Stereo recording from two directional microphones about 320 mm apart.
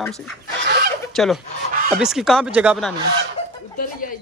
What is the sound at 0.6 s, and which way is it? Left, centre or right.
Chicken, right.